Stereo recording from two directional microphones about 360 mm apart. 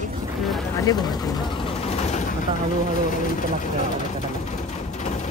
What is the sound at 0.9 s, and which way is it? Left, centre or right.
Vehicle, centre.